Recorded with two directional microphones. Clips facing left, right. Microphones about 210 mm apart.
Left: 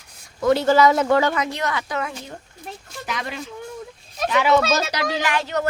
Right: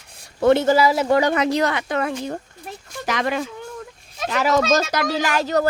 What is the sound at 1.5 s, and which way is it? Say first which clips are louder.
Speech: right 7 dB; 40° right (ahead or behind).